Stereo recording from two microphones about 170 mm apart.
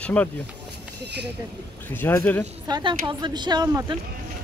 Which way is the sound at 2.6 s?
25° right (ahead or behind).